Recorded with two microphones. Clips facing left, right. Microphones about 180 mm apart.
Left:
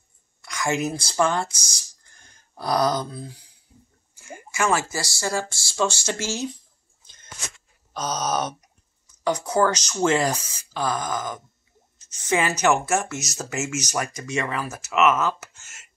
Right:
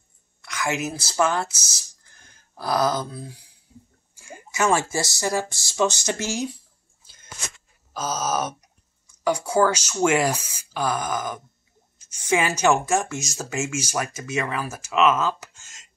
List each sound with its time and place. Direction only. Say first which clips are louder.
0.4 s a woman's voice: left 2 dB; centre (ahead or behind)
1.2 s a sound: even; 5° right (ahead or behind)
4.5 s speech: right 2 dB; 25° right (ahead or behind)
7.9 s speech: even; 5° right (ahead or behind)